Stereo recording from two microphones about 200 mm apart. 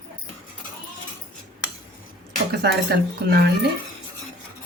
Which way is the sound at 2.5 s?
50° right (ahead or behind).